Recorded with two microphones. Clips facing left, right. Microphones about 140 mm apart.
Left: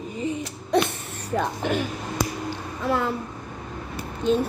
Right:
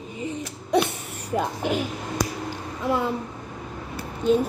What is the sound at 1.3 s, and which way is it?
Speech, 10° right (ahead or behind).